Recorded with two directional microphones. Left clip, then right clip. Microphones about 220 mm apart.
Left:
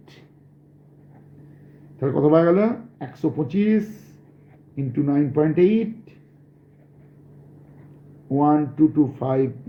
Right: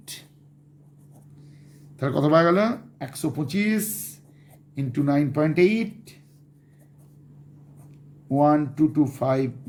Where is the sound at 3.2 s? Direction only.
55° right (ahead or behind).